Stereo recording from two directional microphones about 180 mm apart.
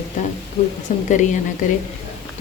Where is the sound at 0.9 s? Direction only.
40° left (ahead or behind).